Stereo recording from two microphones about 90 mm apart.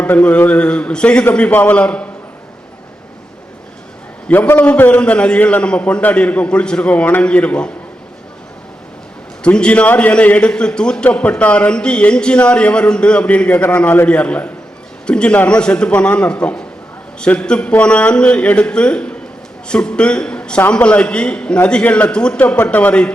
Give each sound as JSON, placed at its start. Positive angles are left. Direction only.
{"t": 0.0, "sound": "a man's voice", "side_deg": 15}
{"t": 4.3, "sound": "a man's voice", "side_deg": 25}
{"t": 9.4, "sound": "a man's voice", "side_deg": 10}